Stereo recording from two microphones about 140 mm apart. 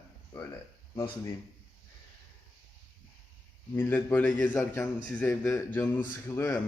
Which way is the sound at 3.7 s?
15° left (ahead or behind).